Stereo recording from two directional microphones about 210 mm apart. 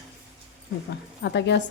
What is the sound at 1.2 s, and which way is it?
Speech, 55° left (ahead or behind).